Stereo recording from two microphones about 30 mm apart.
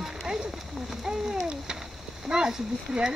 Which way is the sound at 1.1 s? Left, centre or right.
Right.